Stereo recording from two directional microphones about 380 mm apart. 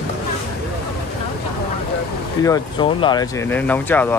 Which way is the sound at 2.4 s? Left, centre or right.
Centre.